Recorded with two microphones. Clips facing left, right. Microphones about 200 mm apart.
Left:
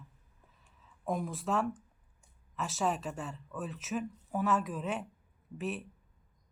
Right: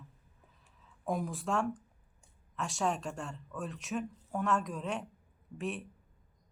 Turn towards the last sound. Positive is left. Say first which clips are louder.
# left 1 dB
turn(degrees=0)  # may be behind; listen again after turning